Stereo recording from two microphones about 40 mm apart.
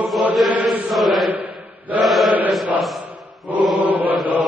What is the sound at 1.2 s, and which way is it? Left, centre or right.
Chant, right.